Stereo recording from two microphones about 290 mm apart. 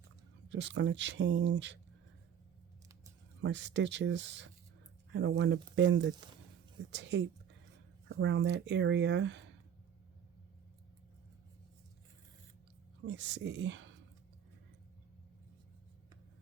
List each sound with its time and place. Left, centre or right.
0.5 s speech: right
3.4 s speech: right
5.7 s speech: right
13.1 s speech: right